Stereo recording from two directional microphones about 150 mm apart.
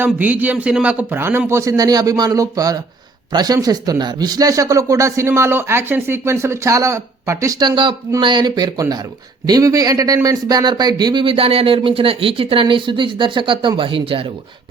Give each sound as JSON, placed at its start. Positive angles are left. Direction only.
{"t": 0.0, "sound": "a man's voice", "side_deg": -10}